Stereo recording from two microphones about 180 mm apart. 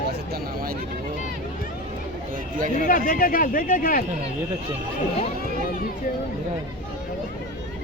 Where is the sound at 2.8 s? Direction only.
50° left (ahead or behind).